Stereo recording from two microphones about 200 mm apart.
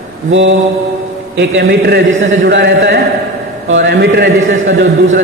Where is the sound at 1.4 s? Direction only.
60° right (ahead or behind).